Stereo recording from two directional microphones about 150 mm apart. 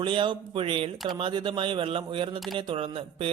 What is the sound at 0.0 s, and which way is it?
Speech, 35° right (ahead or behind).